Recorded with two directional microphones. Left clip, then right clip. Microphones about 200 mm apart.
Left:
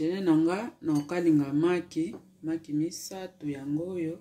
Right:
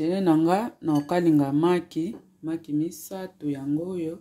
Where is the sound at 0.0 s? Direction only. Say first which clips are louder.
Right 3 dB; 45° right (ahead or behind).